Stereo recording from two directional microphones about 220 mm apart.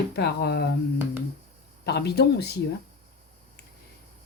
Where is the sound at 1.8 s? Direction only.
50° left (ahead or behind).